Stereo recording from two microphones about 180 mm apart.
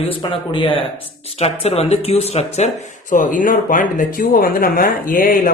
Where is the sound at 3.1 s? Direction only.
45° left (ahead or behind).